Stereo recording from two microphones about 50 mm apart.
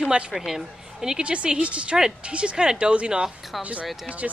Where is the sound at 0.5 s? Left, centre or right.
Centre.